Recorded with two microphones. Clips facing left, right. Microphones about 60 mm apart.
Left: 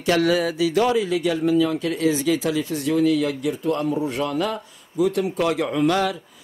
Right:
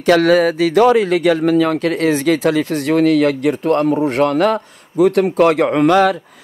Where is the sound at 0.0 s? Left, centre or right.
Right.